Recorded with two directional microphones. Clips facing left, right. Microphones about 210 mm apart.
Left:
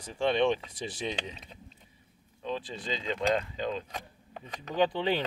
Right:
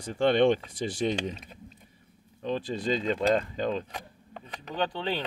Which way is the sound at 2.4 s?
45° right (ahead or behind).